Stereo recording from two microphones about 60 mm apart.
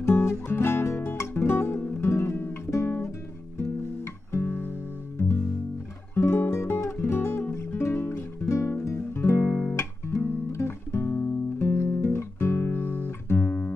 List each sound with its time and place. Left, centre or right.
0.0 s music: left
4.5 s music: left
6.1 s music: left
9.5 s music: left
9.8 s music: left
12.7 s music: left